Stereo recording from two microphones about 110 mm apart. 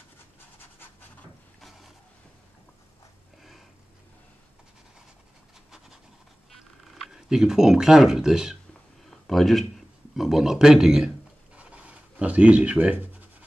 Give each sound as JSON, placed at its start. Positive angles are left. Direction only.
{"t": 0.6, "sound": "pant", "side_deg": 20}
{"t": 1.6, "sound": "vehicle", "side_deg": 0}
{"t": 6.9, "sound": "speech", "side_deg": 0}
{"t": 11.5, "sound": "writing", "side_deg": -10}